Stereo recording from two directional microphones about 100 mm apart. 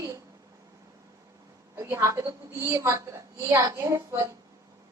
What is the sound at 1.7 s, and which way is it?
A woman's voice, 25° right (ahead or behind).